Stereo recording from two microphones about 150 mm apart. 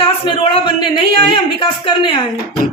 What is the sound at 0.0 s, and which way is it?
A man's voice, 35° left (ahead or behind).